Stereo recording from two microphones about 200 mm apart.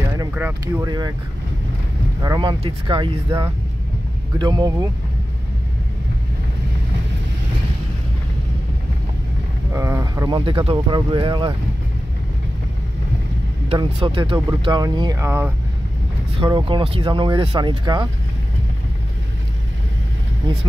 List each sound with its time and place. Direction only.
0.3 s speech: 10° right (ahead or behind)
0.8 s speech: 20° right (ahead or behind)
2.2 s speech: 20° right (ahead or behind)
3.3 s speech: 15° right (ahead or behind)
9.7 s speech: 15° right (ahead or behind)
13.7 s speech: 25° right (ahead or behind)
16.3 s speech: 25° right (ahead or behind)